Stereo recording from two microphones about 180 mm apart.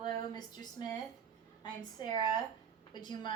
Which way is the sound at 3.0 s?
25° left (ahead or behind).